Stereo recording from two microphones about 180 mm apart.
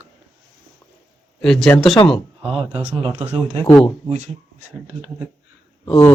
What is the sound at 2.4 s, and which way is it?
Speech, 30° right (ahead or behind).